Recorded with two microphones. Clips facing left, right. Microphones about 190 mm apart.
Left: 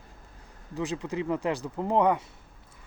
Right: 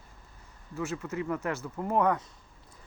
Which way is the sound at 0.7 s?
15° left (ahead or behind).